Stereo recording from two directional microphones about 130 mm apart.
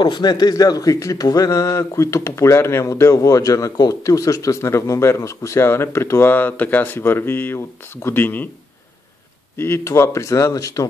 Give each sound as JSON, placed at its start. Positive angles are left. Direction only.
{"t": 0.0, "sound": "speech", "side_deg": 35}
{"t": 9.6, "sound": "speech", "side_deg": 20}